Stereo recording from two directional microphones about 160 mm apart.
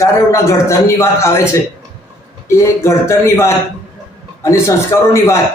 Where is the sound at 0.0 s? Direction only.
20° left (ahead or behind).